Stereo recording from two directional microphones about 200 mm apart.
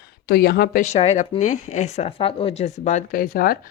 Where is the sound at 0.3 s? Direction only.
50° left (ahead or behind).